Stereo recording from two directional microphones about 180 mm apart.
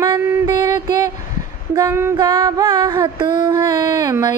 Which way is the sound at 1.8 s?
15° right (ahead or behind).